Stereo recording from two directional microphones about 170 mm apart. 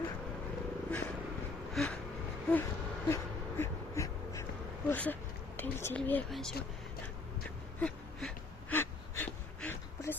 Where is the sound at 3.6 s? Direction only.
15° left (ahead or behind).